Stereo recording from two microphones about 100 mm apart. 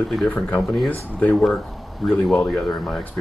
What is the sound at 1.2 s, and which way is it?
Speech, 15° left (ahead or behind).